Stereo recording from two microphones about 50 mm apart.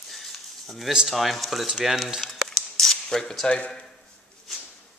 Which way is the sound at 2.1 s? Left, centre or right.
Centre.